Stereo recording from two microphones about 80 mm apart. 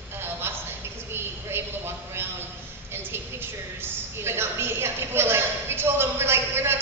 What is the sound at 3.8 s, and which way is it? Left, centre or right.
A man's voice, right.